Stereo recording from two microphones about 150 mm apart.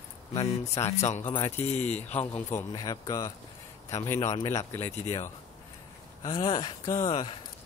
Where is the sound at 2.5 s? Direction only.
25° left (ahead or behind).